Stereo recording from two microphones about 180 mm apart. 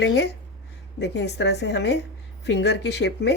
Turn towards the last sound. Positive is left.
turn(degrees=70)  # may be behind; listen again after turning